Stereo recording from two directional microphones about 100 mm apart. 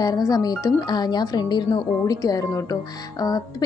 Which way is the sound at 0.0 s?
40° left (ahead or behind).